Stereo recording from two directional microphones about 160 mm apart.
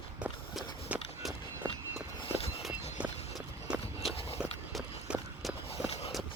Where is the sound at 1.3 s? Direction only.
20° right (ahead or behind).